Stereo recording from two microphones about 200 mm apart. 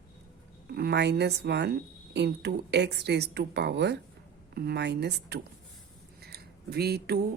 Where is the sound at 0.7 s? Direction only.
55° right (ahead or behind).